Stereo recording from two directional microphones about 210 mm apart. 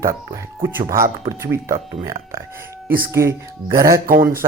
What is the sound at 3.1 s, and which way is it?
Speech, 10° right (ahead or behind).